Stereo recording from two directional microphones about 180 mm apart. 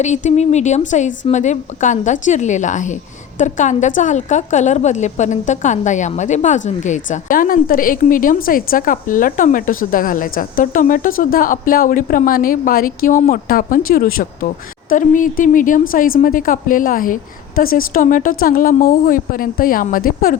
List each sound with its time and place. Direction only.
0.0 s a woman's voice: 40° left (ahead or behind)